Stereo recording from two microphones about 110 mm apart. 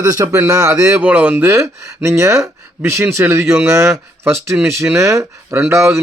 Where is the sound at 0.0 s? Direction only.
30° right (ahead or behind).